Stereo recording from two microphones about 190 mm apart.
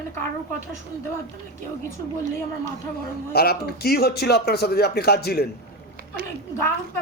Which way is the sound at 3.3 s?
55° left (ahead or behind).